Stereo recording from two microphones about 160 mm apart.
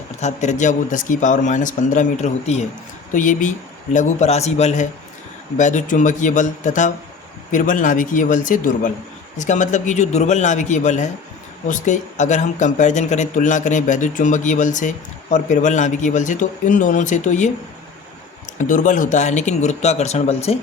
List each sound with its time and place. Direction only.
0.2 s speech: 45° left (ahead or behind)
3.9 s a man's voice: 45° left (ahead or behind)
18.6 s speech: 55° left (ahead or behind)